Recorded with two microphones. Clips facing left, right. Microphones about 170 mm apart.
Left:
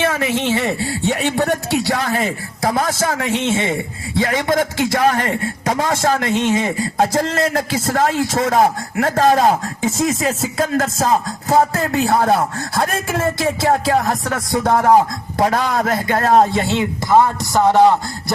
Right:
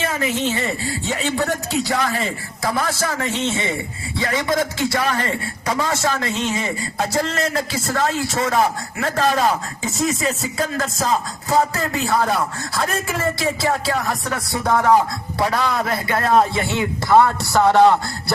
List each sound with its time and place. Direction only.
0.1 s speech: 90° left; by 14.2 s 45° left (ahead or behind)
15.4 s speech: 45° left (ahead or behind)
16.6 s a man's voice: 25° left (ahead or behind)